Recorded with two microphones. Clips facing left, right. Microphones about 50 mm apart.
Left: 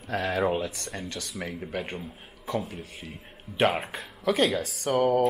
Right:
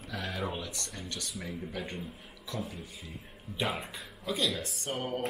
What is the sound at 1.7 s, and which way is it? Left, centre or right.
Speech, left.